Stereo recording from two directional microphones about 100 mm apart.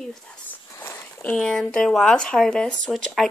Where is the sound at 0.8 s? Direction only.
25° left (ahead or behind).